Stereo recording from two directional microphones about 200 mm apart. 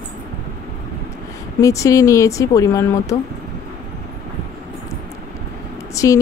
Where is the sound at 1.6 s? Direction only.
15° left (ahead or behind).